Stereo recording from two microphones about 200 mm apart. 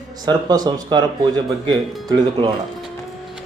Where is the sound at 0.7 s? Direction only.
20° right (ahead or behind).